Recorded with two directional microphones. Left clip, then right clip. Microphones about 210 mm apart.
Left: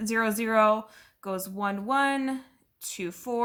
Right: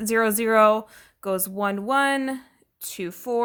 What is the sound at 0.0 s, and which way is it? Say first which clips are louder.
Speech: right 6 dB; 40° right (ahead or behind).